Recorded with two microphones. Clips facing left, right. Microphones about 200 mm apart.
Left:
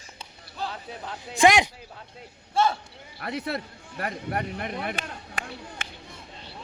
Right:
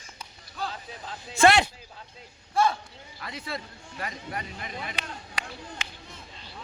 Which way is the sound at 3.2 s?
60° left (ahead or behind).